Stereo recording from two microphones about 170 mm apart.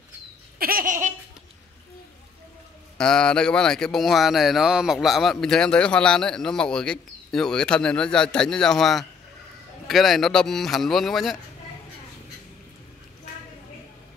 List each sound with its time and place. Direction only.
0.6 s laughter: 60° right (ahead or behind)
3.0 s speech: 5° left (ahead or behind)